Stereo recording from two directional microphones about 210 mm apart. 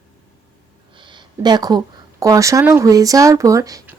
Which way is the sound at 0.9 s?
20° right (ahead or behind).